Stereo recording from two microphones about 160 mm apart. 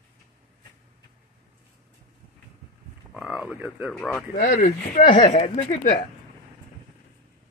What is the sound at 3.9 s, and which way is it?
Speech, 5° left (ahead or behind).